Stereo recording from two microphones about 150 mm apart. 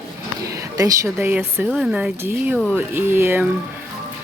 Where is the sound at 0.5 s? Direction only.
20° right (ahead or behind).